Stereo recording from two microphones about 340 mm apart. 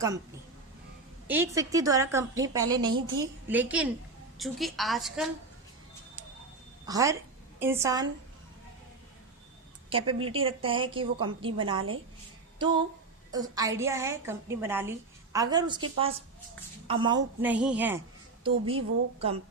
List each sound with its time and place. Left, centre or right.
1.3 s a woman's voice: centre
6.8 s a woman's voice: centre
9.9 s a woman's voice: centre
18.4 s a woman's voice: centre